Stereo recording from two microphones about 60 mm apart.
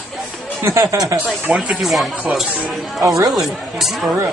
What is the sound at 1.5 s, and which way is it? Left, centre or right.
Speech, centre.